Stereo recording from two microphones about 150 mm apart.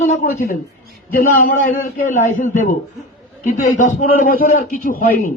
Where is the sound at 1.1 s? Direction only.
65° left (ahead or behind).